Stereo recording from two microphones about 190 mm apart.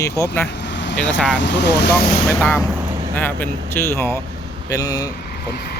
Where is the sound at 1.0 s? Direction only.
5° left (ahead or behind).